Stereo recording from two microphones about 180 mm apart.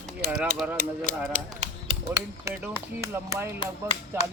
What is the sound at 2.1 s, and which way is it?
Speech, 15° right (ahead or behind).